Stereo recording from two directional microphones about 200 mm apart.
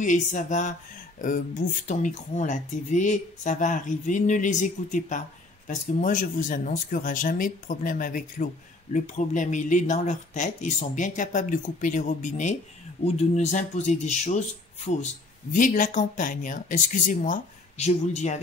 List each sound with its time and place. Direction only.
0.0 s speech: 40° left (ahead or behind)